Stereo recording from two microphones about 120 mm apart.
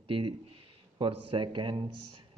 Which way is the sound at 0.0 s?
45° right (ahead or behind).